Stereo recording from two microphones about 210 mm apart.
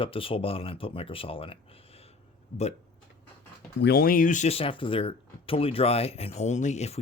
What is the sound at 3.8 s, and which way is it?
Speech, 50° left (ahead or behind).